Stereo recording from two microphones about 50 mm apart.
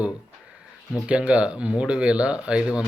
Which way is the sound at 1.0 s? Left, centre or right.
Right.